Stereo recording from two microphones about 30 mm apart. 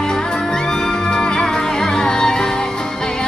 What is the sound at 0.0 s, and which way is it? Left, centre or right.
Music, left.